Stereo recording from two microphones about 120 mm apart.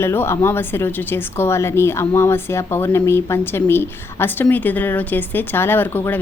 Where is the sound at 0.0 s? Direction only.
20° left (ahead or behind).